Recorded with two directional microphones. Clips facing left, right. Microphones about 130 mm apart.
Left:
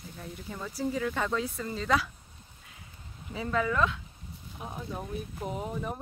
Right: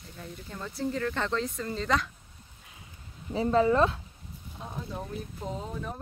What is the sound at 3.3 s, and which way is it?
Speech, 30° right (ahead or behind).